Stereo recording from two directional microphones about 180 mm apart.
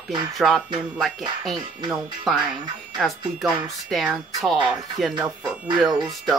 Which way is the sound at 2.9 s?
Centre (ahead or behind).